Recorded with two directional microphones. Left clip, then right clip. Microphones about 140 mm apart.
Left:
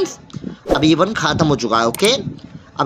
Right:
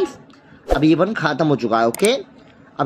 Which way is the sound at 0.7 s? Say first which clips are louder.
Left 1 dB; 25° left (ahead or behind).